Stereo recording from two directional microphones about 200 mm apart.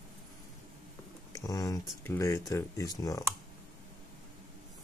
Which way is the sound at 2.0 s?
10° left (ahead or behind).